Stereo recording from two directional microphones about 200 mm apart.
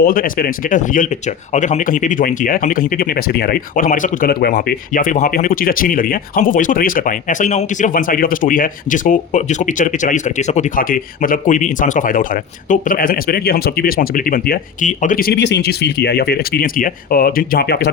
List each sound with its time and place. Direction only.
0.0 s speech: 45° left (ahead or behind)